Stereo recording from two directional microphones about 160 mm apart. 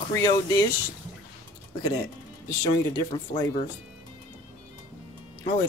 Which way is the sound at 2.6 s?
30° left (ahead or behind).